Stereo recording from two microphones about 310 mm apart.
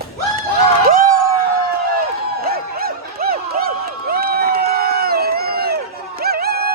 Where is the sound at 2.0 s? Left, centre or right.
Right.